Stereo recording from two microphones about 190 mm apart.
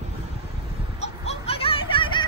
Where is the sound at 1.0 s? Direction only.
30° left (ahead or behind).